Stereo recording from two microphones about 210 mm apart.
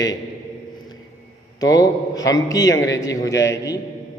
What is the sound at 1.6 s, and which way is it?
A man's voice, 15° left (ahead or behind).